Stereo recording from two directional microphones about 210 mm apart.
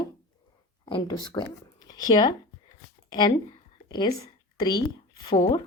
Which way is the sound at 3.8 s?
20° left (ahead or behind).